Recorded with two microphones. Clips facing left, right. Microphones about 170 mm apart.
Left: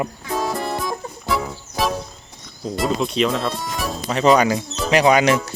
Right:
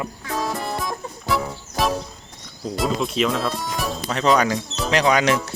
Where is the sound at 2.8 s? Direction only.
Centre (ahead or behind).